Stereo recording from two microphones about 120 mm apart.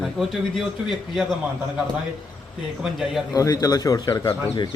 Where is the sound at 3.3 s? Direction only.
30° left (ahead or behind).